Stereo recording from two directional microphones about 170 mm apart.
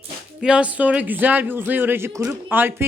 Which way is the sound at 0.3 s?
5° right (ahead or behind).